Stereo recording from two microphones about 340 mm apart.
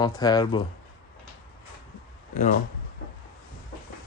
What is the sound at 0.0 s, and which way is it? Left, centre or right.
Speech, centre.